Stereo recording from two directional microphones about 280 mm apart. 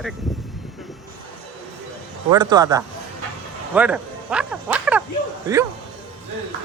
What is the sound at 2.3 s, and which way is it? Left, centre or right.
Speech, centre.